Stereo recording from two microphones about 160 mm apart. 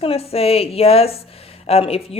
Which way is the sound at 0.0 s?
40° left (ahead or behind).